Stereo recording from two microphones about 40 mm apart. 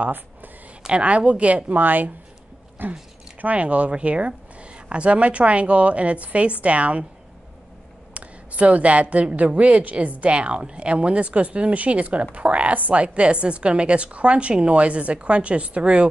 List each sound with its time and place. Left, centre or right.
0.0 s speech: right
0.8 s speech: right
3.3 s speech: right
8.1 s speech: right